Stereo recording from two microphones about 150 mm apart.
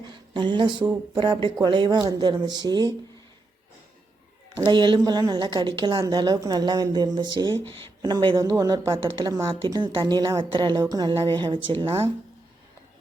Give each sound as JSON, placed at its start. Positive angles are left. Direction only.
{"t": 0.1, "sound": "a woman's voice", "side_deg": -30}
{"t": 4.6, "sound": "a woman's voice", "side_deg": -30}